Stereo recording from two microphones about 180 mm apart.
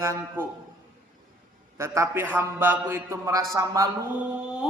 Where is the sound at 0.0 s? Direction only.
15° right (ahead or behind).